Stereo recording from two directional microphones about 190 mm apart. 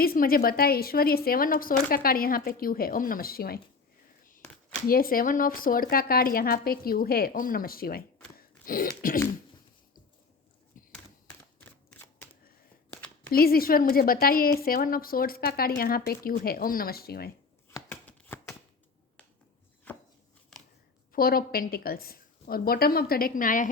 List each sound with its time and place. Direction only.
0.0 s speech: 50° left (ahead or behind)
4.9 s speech: 50° left (ahead or behind)
10.8 s a sound: 45° left (ahead or behind)
11.6 s shuffling cards: 10° left (ahead or behind)
13.3 s speech: 50° left (ahead or behind)
17.7 s shuffling cards: 10° left (ahead or behind)
19.9 s a sound: 10° left (ahead or behind)
21.1 s speech: 50° left (ahead or behind)